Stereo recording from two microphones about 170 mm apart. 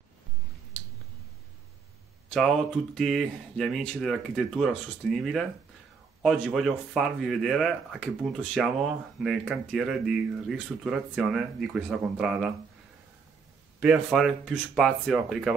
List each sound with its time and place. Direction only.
2.3 s speech: centre (ahead or behind)
13.7 s speech: 5° right (ahead or behind)